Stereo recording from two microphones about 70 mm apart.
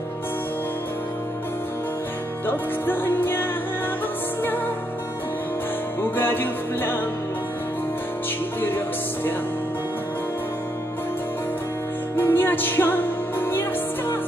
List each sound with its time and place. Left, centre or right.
2.4 s music: left
6.1 s music: left
8.5 s music: left
12.2 s music: left